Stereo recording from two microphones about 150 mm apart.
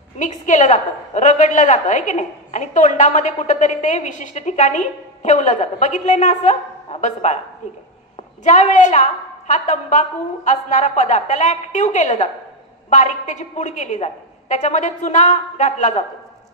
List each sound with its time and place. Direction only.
0.2 s a woman's voice: 50° left (ahead or behind)
8.5 s a woman's voice: 55° left (ahead or behind)